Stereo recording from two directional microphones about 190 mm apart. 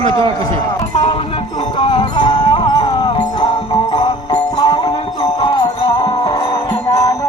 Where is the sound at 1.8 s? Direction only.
25° left (ahead or behind).